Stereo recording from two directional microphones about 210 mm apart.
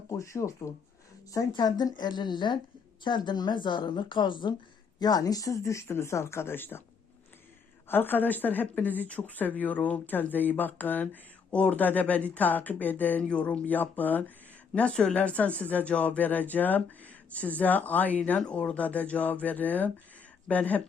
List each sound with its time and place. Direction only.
0.1 s a woman's voice: 15° left (ahead or behind)
7.9 s speech: 10° left (ahead or behind)